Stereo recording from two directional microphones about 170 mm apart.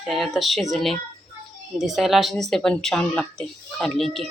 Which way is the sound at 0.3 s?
Centre (ahead or behind).